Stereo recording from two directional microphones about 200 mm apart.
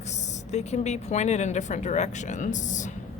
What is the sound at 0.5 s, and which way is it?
Speech, 35° left (ahead or behind).